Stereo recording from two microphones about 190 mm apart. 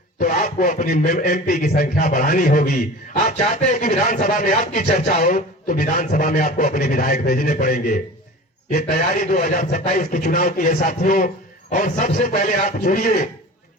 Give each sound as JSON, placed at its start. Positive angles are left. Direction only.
{"t": 0.2, "sound": "a man's voice", "side_deg": 45}